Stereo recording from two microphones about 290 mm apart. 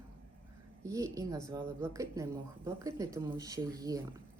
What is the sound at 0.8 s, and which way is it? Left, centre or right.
Speech, centre.